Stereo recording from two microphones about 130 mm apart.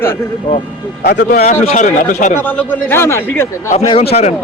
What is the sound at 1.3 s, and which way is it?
Speech, 65° left (ahead or behind).